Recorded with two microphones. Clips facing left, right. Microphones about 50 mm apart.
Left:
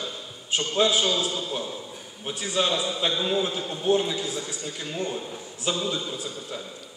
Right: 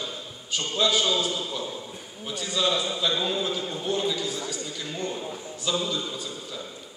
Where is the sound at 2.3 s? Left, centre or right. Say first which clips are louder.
Left 1 dB; left.